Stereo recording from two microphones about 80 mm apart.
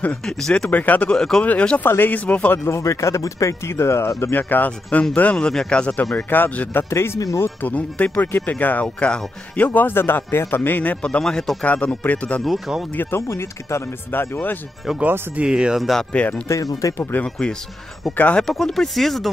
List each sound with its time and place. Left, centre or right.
0.2 s a man's voice: centre
1.1 s a man's voice: centre
2.5 s a man's voice: left
7.6 s a man's voice: left
12.4 s speech: centre
12.9 s speech: left
15.0 s speech: right
15.4 s speech: centre
16.1 s a man's voice: centre
18.4 s speech: centre